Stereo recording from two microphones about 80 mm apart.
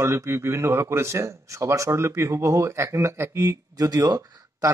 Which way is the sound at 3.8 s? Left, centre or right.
Right.